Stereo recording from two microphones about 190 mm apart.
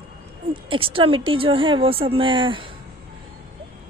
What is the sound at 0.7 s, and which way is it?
Speech, 30° right (ahead or behind).